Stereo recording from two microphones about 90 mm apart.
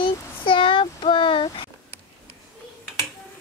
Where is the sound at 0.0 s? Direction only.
70° left (ahead or behind).